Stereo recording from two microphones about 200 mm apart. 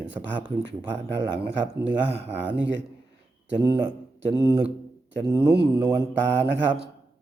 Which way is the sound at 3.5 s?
10° right (ahead or behind).